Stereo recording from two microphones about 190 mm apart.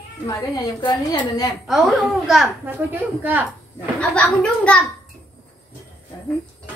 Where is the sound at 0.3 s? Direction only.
20° left (ahead or behind).